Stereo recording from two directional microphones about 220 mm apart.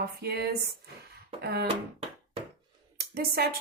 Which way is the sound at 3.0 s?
45° right (ahead or behind).